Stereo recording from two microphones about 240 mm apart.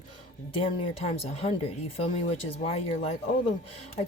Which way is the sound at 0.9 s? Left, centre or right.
Left.